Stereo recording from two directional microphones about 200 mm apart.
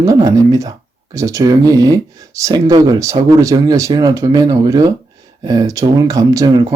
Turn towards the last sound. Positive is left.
turn(degrees=-20)  # may be behind; listen again after turning